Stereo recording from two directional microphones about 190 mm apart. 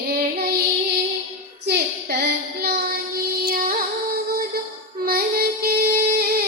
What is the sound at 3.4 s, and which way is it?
Music, 50° right (ahead or behind).